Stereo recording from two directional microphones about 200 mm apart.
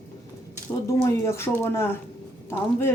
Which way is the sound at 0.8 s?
15° left (ahead or behind).